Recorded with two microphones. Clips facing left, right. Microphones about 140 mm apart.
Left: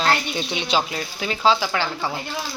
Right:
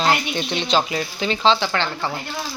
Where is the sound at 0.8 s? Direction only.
Centre (ahead or behind).